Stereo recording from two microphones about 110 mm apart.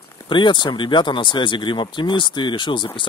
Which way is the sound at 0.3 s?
45° left (ahead or behind).